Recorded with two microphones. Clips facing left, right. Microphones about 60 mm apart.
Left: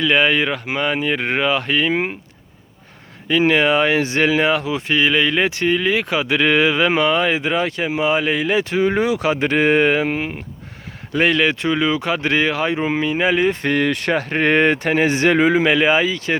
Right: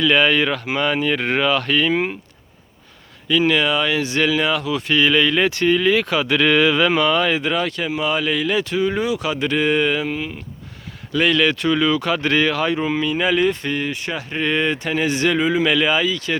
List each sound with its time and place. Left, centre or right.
0.0 s speech: centre
3.2 s speech: left
13.6 s speech: left